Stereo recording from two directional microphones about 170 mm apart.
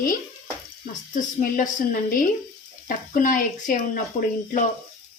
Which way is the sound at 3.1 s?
50° left (ahead or behind).